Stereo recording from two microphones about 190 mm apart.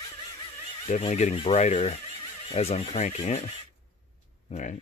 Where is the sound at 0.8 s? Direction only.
35° left (ahead or behind).